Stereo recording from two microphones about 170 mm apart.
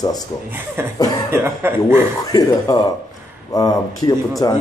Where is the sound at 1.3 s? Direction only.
15° right (ahead or behind).